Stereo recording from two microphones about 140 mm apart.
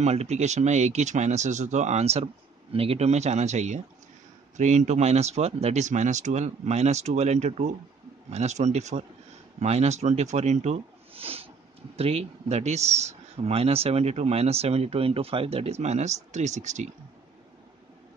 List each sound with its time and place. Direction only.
0.0 s speech: 50° right (ahead or behind)